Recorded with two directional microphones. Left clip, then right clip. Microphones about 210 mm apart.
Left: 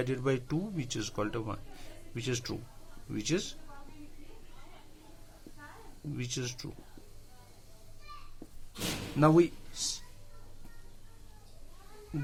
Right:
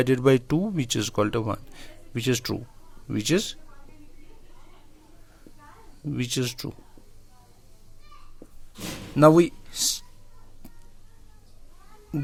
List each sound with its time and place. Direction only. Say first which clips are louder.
0.0 s speech: right 12 dB; 45° right (ahead or behind)
6.1 s speech: right 10 dB; 45° right (ahead or behind)
9.1 s speech: right 9 dB; 45° right (ahead or behind)